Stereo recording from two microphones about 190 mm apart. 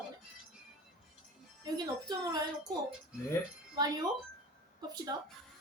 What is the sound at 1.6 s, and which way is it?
Speech, 20° right (ahead or behind).